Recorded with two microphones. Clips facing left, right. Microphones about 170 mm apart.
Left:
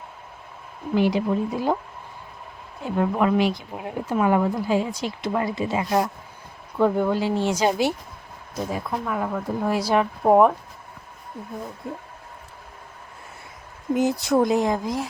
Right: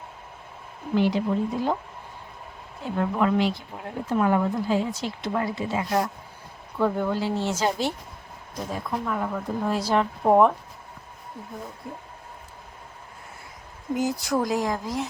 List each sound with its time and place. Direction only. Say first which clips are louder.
0.9 s speech: left 2 dB; 10° left (ahead or behind)
2.8 s speech: left 2 dB; 15° left (ahead or behind)
13.9 s speech: left 5 dB; 20° left (ahead or behind)